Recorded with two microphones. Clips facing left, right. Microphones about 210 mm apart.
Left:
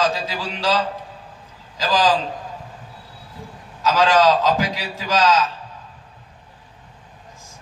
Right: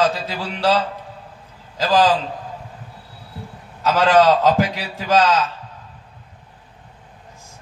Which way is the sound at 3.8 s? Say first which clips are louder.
Right 2 dB; 55° right (ahead or behind).